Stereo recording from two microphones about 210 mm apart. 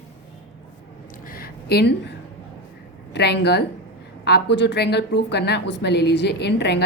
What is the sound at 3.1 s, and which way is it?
A woman's voice, 55° left (ahead or behind).